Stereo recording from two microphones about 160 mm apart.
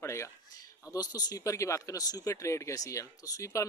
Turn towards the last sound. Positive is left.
turn(degrees=20)  # may be behind; listen again after turning